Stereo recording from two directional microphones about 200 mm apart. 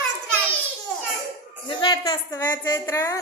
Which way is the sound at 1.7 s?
20° left (ahead or behind).